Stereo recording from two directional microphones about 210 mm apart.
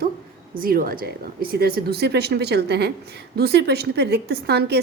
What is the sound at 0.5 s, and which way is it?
A woman's voice, 45° right (ahead or behind).